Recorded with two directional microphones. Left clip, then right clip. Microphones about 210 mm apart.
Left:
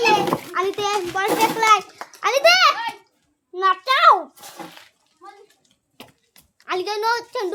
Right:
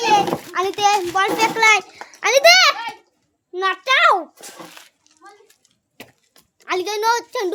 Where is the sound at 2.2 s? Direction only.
30° right (ahead or behind).